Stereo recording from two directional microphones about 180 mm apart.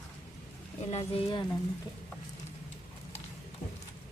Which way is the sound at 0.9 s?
35° left (ahead or behind).